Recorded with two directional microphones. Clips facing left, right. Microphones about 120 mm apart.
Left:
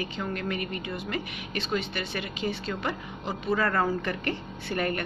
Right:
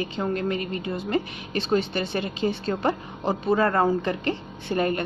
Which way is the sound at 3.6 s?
25° right (ahead or behind).